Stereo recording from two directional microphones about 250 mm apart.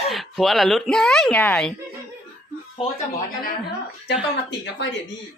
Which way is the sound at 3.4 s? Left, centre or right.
Left.